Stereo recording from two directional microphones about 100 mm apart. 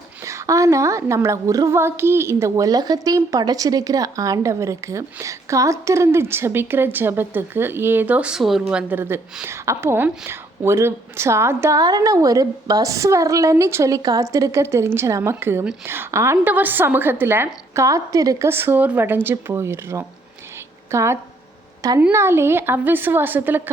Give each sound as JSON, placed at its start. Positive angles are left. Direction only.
{"t": 0.3, "sound": "a woman's voice", "side_deg": -30}
{"t": 8.6, "sound": "a woman's voice", "side_deg": -15}
{"t": 11.8, "sound": "a woman's voice", "side_deg": -40}